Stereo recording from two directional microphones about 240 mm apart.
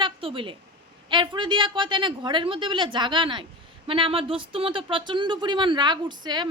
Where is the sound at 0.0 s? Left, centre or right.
Right.